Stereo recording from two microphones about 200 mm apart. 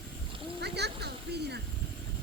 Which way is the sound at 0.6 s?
55° right (ahead or behind).